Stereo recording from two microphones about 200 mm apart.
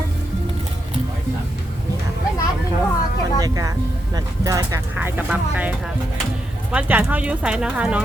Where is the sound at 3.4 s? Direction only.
20° right (ahead or behind).